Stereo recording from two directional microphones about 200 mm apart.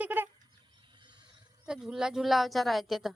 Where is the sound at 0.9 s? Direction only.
25° right (ahead or behind).